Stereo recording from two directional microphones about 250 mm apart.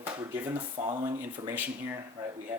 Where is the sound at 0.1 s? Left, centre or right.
Centre.